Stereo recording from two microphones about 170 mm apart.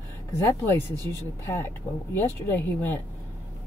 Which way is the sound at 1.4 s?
15° left (ahead or behind).